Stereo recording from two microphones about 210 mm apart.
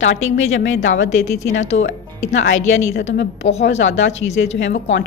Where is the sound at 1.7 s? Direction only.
45° left (ahead or behind).